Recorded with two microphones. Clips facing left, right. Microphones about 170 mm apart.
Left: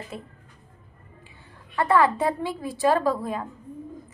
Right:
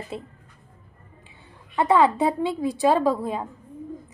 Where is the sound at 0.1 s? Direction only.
25° right (ahead or behind).